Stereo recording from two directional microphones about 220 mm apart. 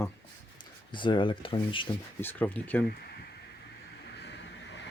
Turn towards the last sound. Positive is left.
turn(degrees=55)  # may be behind; listen again after turning